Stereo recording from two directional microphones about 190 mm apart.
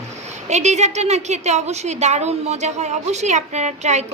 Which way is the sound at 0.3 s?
35° right (ahead or behind).